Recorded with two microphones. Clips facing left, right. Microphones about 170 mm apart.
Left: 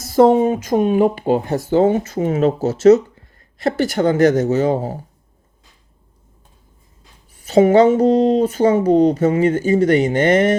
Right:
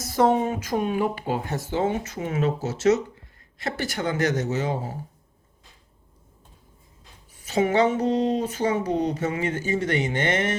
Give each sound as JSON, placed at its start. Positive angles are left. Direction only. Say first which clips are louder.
{"t": 0.0, "sound": "speech", "louder": "left 9 dB", "side_deg": 30}
{"t": 7.4, "sound": "speech", "louder": "left 10 dB", "side_deg": 35}